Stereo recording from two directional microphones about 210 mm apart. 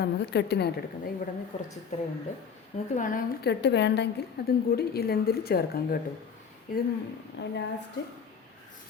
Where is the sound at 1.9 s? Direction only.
35° left (ahead or behind).